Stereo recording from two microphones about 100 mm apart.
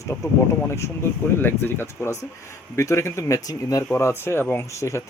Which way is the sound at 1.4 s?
20° left (ahead or behind).